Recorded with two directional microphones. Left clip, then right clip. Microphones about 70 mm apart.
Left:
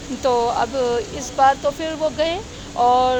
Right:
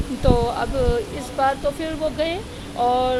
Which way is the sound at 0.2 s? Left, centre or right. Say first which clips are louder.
Left 3 dB; right.